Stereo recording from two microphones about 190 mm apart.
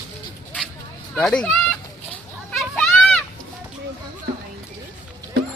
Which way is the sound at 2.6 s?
5° left (ahead or behind).